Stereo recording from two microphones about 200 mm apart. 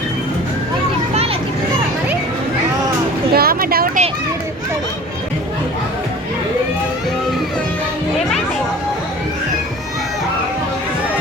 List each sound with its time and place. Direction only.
3.3 s vehicle: 50° right (ahead or behind)